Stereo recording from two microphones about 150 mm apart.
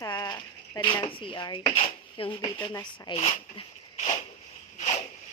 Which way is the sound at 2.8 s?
35° left (ahead or behind).